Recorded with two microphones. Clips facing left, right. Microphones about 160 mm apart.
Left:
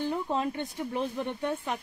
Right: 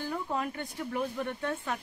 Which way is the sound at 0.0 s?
25° left (ahead or behind).